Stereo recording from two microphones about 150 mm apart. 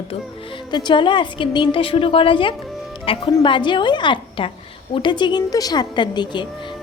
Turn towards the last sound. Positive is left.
turn(degrees=30)  # may be behind; listen again after turning